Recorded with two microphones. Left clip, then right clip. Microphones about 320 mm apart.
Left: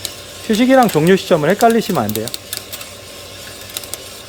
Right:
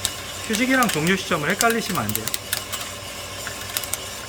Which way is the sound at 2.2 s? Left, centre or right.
Centre.